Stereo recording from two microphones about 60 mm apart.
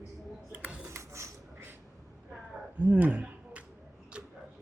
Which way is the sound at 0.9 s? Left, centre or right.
Right.